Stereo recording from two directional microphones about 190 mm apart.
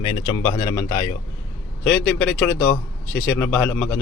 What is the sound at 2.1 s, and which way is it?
Speech, 5° left (ahead or behind).